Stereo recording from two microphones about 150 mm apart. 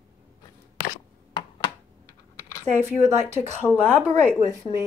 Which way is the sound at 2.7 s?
15° right (ahead or behind).